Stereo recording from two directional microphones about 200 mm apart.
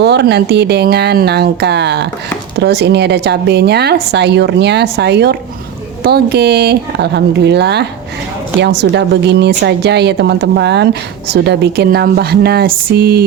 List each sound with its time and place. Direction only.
0.0 s a woman's voice: 55° right (ahead or behind)